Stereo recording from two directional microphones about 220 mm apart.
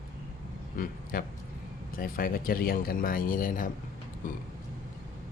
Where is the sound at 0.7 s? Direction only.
40° left (ahead or behind).